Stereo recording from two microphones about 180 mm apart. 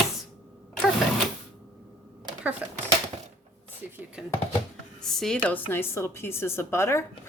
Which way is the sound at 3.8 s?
10° right (ahead or behind).